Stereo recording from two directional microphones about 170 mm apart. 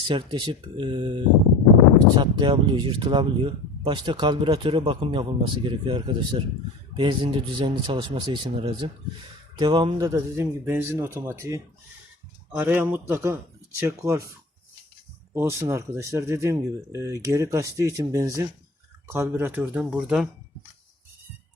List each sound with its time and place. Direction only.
0.1 s speech: 30° right (ahead or behind)
15.3 s speech: 15° right (ahead or behind)